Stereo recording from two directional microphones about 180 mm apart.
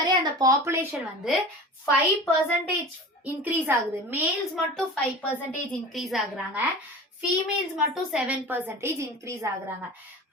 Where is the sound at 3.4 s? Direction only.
10° right (ahead or behind).